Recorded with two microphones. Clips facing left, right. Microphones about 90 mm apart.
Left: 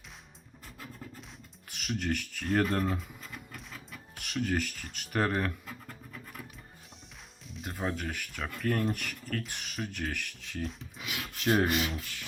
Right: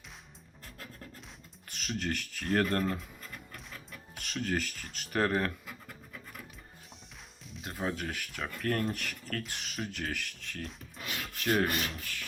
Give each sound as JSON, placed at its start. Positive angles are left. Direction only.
{"t": 1.7, "sound": "speech", "side_deg": 5}
{"t": 7.4, "sound": "speech", "side_deg": 0}
{"t": 11.0, "sound": "filing", "side_deg": 15}